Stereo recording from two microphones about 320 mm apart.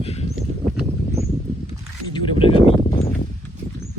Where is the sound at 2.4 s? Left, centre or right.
Centre.